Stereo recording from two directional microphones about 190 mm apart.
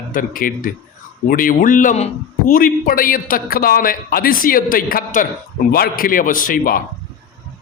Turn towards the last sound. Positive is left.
turn(degrees=50)  # may be behind; listen again after turning